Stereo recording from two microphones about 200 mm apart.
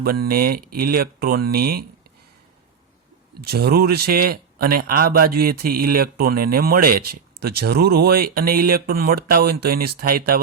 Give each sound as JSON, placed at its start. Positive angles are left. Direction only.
{"t": 0.0, "sound": "a man's voice", "side_deg": -50}
{"t": 3.4, "sound": "a man's voice", "side_deg": -50}